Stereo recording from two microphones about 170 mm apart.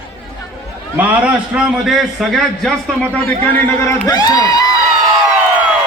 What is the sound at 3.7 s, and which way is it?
Music, 15° left (ahead or behind).